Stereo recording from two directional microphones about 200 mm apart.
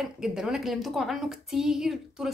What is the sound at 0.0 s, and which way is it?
Speech, centre (ahead or behind).